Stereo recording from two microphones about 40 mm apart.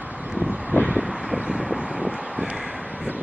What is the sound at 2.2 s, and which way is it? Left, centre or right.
Crow, centre.